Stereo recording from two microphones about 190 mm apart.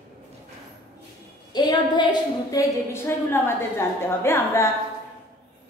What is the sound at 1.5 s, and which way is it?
A woman's voice, 20° left (ahead or behind).